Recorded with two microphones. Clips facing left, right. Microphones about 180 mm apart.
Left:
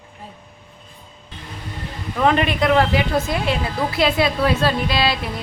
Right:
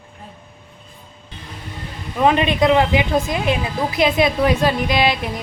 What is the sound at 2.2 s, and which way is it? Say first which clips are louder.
A woman's voice: right 2 dB; 20° right (ahead or behind).